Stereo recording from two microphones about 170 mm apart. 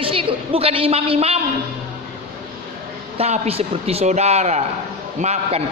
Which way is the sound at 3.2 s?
35° right (ahead or behind).